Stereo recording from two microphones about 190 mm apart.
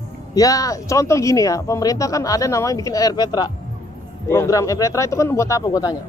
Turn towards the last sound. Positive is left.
turn(degrees=20)  # may be behind; listen again after turning